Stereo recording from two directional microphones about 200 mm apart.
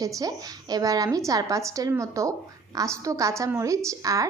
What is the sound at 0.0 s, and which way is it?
A woman's voice, 15° right (ahead or behind).